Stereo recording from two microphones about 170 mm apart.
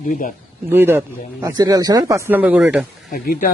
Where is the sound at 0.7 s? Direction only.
15° right (ahead or behind).